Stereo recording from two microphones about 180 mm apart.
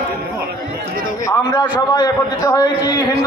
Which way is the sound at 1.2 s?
20° left (ahead or behind).